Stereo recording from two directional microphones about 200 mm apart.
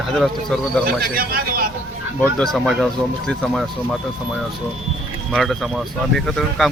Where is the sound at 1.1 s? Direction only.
45° right (ahead or behind).